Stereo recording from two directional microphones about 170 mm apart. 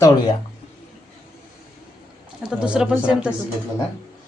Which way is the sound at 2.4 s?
5° right (ahead or behind).